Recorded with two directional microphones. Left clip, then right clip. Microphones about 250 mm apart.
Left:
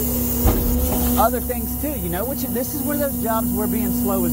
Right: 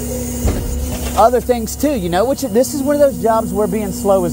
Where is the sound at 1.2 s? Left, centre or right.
Right.